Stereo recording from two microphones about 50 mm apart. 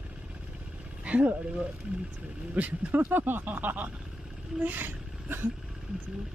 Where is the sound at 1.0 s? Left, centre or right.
Right.